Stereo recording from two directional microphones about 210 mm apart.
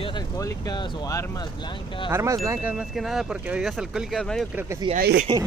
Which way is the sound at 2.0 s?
15° right (ahead or behind).